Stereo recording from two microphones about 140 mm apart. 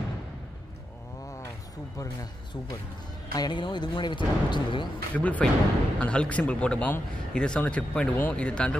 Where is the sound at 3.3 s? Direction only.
30° left (ahead or behind).